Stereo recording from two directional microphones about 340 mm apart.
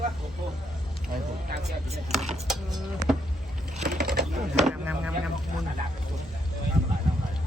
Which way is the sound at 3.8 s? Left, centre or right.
Right.